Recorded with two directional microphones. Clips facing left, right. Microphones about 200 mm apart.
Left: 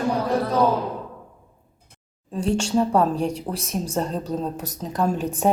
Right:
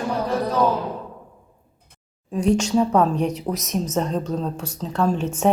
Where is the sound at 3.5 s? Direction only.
30° left (ahead or behind).